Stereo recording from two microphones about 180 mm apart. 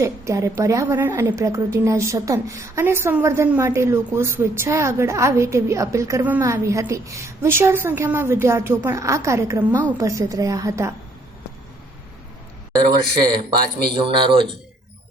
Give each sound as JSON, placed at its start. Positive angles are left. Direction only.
{"t": 0.0, "sound": "a woman's voice", "side_deg": -15}
{"t": 13.9, "sound": "speech", "side_deg": -30}